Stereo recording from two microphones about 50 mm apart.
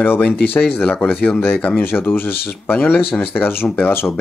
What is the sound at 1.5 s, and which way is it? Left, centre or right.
Speech, left.